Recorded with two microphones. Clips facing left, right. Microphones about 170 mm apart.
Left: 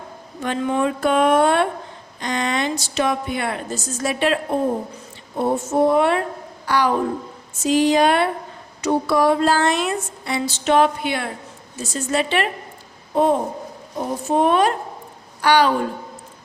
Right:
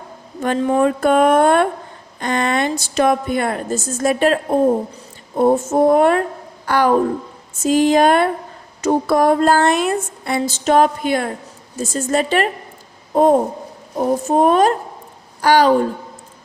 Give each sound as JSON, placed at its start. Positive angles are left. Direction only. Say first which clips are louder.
{"t": 0.4, "sound": "speech", "louder": "right 5 dB", "side_deg": -40}
{"t": 5.4, "sound": "speech", "louder": "right 4 dB", "side_deg": -45}